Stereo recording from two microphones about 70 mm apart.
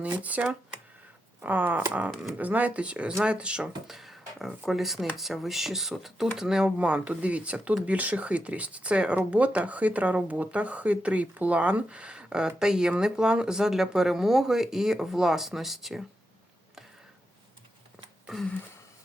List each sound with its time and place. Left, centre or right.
0.2 s speech: right
1.4 s a sound: right
2.4 s speech: right
3.8 s speech: centre